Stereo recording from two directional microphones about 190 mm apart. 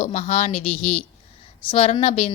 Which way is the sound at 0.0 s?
35° left (ahead or behind).